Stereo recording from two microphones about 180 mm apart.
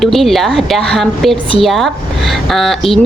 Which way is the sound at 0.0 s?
Centre (ahead or behind).